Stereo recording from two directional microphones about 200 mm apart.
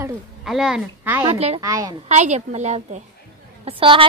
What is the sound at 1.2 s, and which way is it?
Speech, 30° right (ahead or behind).